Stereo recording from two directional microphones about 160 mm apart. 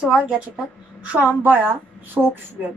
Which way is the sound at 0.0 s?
5° right (ahead or behind).